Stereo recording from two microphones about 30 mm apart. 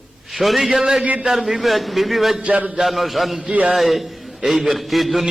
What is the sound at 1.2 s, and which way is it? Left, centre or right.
A man's voice, centre.